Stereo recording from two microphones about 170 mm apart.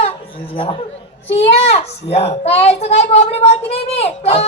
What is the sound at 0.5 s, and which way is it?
A child's voice, 35° left (ahead or behind).